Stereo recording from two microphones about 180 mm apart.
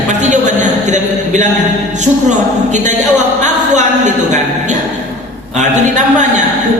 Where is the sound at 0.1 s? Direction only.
40° right (ahead or behind).